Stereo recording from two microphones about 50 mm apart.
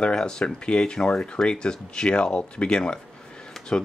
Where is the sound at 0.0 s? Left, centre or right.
Centre.